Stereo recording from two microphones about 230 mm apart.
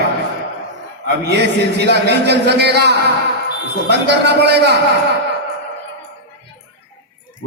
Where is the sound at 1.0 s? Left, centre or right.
Right.